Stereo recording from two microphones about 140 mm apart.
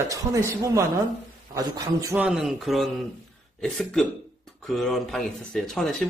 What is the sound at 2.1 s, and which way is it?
Speech, 5° right (ahead or behind).